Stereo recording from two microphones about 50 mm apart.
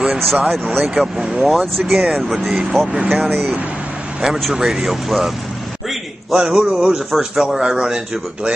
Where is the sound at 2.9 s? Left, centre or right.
Centre.